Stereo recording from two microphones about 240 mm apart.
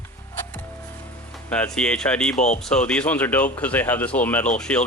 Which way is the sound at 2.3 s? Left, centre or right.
Left.